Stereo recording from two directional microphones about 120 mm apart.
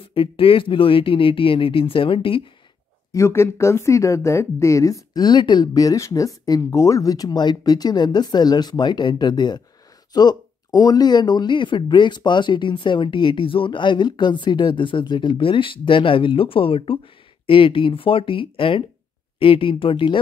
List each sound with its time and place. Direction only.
0.1 s speech: 50° left (ahead or behind)
3.1 s speech: 25° left (ahead or behind); by 20.2 s 45° left (ahead or behind)